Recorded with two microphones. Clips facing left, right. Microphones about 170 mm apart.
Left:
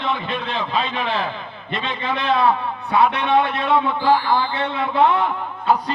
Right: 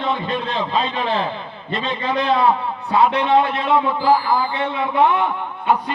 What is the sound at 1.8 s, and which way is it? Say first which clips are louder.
Speech: right 3 dB; 35° right (ahead or behind).